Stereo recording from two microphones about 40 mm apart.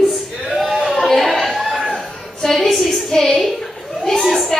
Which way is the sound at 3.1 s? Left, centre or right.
Centre.